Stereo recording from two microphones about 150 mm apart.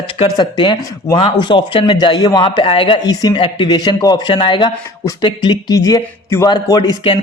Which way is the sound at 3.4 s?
40° left (ahead or behind).